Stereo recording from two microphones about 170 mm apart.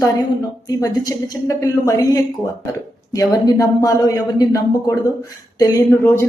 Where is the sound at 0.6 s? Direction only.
20° left (ahead or behind).